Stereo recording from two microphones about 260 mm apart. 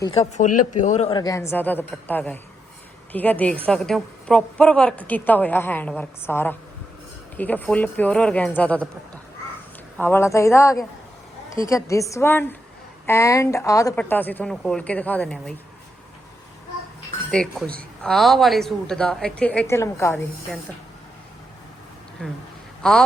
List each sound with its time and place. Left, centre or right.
0.0 s speech: left
0.5 s speech: left
0.8 s a woman's voice: left; by 8.9 s centre
10.0 s a woman's voice: centre
17.3 s a woman's voice: centre
22.2 s a woman's voice: centre